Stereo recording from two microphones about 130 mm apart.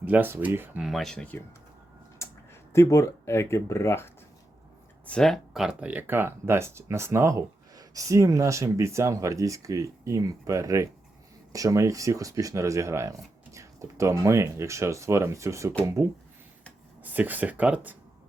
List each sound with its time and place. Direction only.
0.0 s speech: 15° right (ahead or behind)
0.9 s speech: 5° left (ahead or behind)
2.1 s speech: 20° left (ahead or behind)
5.0 s speech: 5° left (ahead or behind); by 15.7 s 25° right (ahead or behind)
17.0 s speech: 15° right (ahead or behind)